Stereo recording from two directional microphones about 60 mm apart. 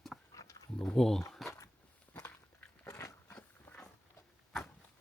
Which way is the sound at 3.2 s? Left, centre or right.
Left.